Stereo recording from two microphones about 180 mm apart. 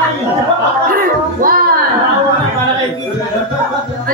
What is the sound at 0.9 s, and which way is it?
Music, 50° right (ahead or behind).